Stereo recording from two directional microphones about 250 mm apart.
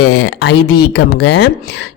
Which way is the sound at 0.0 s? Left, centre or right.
Left.